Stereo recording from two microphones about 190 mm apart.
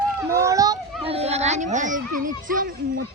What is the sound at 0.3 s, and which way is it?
Children playing, 15° right (ahead or behind).